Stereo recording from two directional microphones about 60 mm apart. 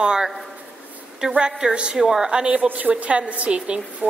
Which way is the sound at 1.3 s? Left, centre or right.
Centre.